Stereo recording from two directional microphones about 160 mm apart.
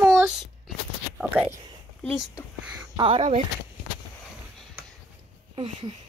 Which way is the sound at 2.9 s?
35° right (ahead or behind).